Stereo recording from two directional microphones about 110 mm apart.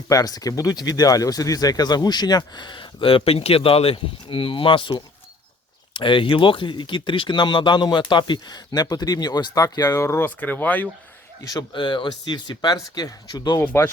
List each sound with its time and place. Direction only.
0.1 s speech: 35° left (ahead or behind); by 10.8 s 15° left (ahead or behind)
11.4 s speech: 40° left (ahead or behind)
13.6 s speech: 25° left (ahead or behind)